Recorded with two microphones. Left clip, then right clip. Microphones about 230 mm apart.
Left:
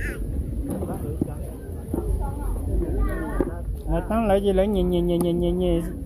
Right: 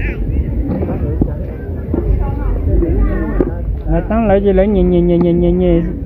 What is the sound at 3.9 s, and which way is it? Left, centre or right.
Speech, left.